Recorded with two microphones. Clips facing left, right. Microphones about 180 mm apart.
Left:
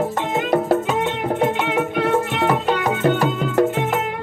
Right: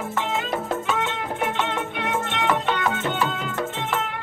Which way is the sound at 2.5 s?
40° left (ahead or behind).